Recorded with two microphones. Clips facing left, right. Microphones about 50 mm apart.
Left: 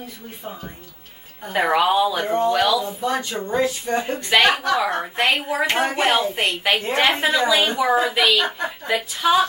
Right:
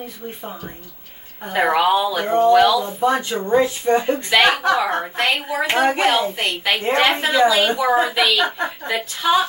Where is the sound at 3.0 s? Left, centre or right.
Right.